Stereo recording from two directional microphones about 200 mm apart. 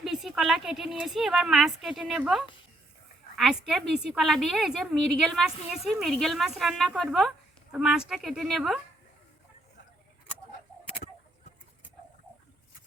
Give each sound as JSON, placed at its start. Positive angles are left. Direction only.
{"t": 0.0, "sound": "a woman's voice", "side_deg": 0}